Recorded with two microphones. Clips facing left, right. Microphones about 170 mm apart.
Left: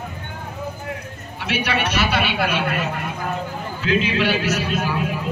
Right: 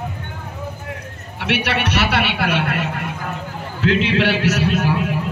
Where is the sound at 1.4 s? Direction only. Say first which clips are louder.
Right 2 dB; 70° right (ahead or behind).